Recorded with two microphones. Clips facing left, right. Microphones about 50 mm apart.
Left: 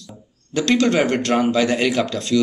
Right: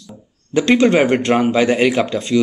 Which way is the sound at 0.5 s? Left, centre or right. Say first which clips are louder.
Right 4 dB; right.